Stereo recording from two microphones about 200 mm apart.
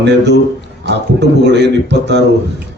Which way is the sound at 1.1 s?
60° right (ahead or behind).